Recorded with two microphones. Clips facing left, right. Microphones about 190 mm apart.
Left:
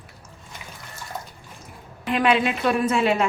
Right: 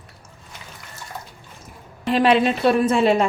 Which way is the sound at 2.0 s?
35° right (ahead or behind).